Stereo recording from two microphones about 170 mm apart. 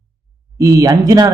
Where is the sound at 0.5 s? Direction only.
20° right (ahead or behind).